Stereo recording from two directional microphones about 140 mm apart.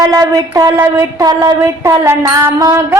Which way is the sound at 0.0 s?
25° right (ahead or behind).